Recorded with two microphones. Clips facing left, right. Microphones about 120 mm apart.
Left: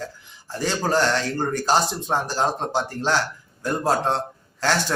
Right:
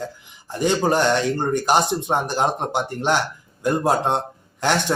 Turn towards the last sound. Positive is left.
turn(degrees=-20)  # may be behind; listen again after turning